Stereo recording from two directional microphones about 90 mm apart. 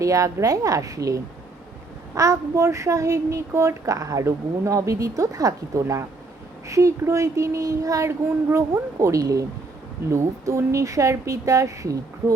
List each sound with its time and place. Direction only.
0.0 s a child's voice: 40° right (ahead or behind)